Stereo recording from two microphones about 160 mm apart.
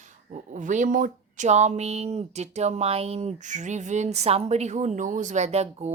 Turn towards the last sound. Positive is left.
turn(degrees=-45)  # may be behind; listen again after turning